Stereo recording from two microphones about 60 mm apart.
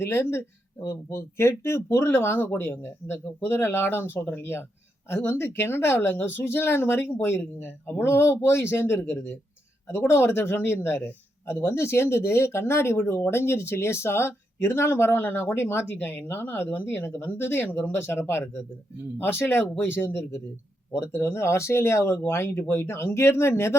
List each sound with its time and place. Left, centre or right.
0.0 s speech: left